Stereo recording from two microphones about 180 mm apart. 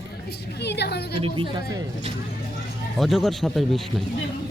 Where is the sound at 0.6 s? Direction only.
65° left (ahead or behind).